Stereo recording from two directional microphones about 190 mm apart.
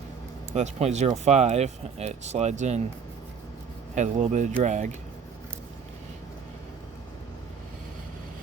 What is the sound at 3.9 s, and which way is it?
Speech, 40° right (ahead or behind).